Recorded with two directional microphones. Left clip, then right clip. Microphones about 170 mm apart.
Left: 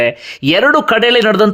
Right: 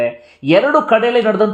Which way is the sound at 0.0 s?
30° left (ahead or behind).